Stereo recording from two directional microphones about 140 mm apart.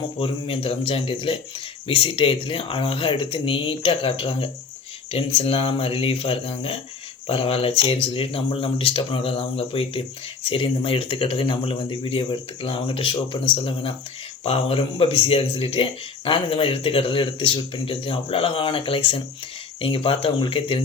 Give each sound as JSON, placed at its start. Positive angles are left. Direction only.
{"t": 0.2, "sound": "speech", "side_deg": 40}